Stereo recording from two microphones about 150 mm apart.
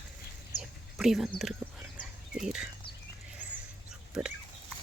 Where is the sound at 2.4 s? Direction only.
5° right (ahead or behind).